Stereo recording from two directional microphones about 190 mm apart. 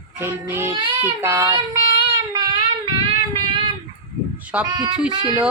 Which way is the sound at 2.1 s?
20° right (ahead or behind).